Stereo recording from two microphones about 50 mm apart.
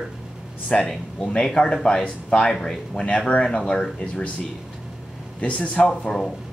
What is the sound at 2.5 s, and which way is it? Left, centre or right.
Speech, centre.